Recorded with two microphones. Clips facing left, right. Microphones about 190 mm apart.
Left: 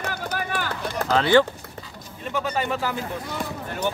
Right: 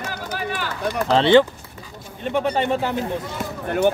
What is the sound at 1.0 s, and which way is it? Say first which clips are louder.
Speech: right 3 dB; 25° right (ahead or behind).